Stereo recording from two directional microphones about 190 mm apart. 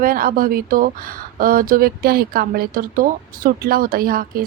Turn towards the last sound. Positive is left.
turn(degrees=-50)  # may be behind; listen again after turning